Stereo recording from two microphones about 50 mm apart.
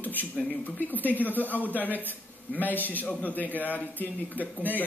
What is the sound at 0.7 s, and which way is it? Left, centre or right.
Speech, left.